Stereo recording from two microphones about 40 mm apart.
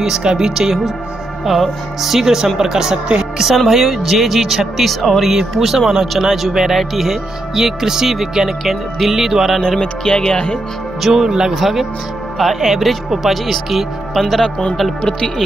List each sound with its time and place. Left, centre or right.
0.0 s speech: centre
9.8 s speech: left
11.0 s speech: centre
11.2 s speech: centre
11.5 s speech: centre
14.4 s speech: left